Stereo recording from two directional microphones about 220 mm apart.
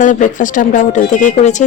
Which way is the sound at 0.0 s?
35° left (ahead or behind).